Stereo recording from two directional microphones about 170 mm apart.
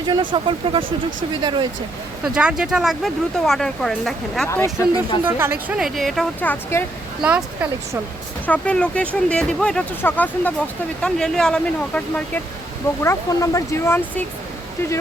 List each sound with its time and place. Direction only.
0.0 s speech: 25° right (ahead or behind)
2.2 s speech: 5° right (ahead or behind)
4.5 s speech: 15° left (ahead or behind)
5.2 s speech: 10° right (ahead or behind); by 6.8 s 10° left (ahead or behind)
7.2 s speech: 5° right (ahead or behind)
8.4 s speech: 5° left (ahead or behind)
13.0 s speech: 15° left (ahead or behind)